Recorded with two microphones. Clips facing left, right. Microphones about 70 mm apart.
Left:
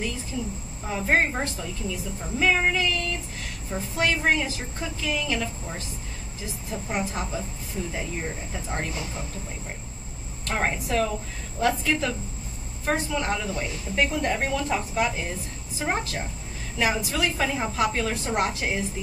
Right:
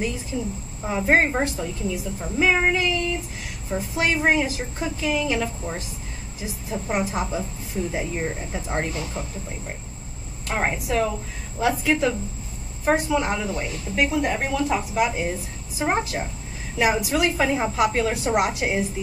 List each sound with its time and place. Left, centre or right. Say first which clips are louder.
0.3 s a woman's voice: right 3 dB; right
10.4 s a woman's voice: right 2 dB; centre